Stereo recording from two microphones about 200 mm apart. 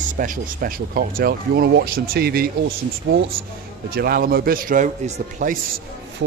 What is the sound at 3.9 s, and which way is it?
Speech, 50° right (ahead or behind).